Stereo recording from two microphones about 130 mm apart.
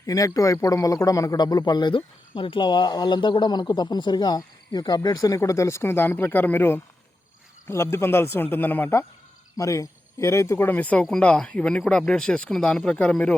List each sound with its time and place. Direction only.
0.0 s speech: 25° left (ahead or behind); by 13.3 s 10° left (ahead or behind)